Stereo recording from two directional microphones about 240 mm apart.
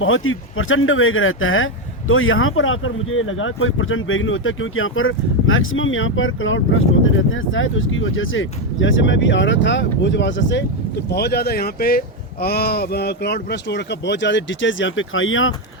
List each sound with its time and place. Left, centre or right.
0.0 s speech: left